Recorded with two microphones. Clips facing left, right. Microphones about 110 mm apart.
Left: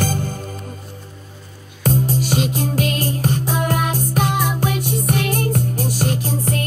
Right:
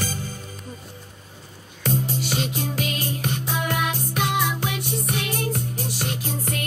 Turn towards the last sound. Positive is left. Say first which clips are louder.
# left 7 dB
turn(degrees=35)  # may be behind; listen again after turning